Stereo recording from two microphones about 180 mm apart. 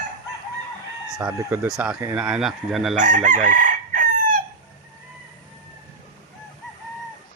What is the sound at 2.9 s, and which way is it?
Chicken, 45° right (ahead or behind).